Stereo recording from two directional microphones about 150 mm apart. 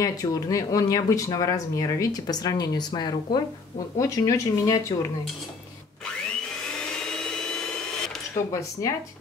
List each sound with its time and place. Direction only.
0.0 s speech: 20° left (ahead or behind)
7.3 s vehicle: 5° left (ahead or behind)
8.5 s speech: 20° left (ahead or behind)